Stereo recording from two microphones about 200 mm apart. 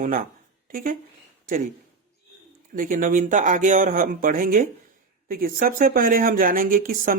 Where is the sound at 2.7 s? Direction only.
45° right (ahead or behind).